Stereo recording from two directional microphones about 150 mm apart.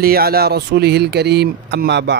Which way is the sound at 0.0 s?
90° right.